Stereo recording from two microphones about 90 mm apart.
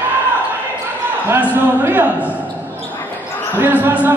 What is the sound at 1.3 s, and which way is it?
A man's voice, 25° right (ahead or behind).